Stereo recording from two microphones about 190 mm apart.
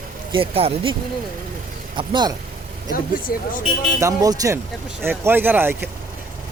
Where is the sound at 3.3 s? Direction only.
50° left (ahead or behind).